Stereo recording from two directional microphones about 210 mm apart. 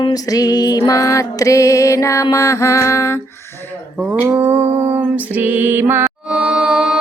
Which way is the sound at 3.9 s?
10° right (ahead or behind).